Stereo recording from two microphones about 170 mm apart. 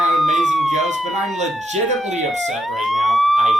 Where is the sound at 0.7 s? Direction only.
45° right (ahead or behind).